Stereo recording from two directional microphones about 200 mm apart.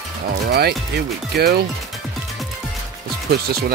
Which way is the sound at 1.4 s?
50° right (ahead or behind).